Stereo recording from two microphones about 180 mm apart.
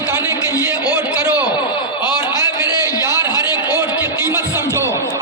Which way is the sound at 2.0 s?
25° left (ahead or behind).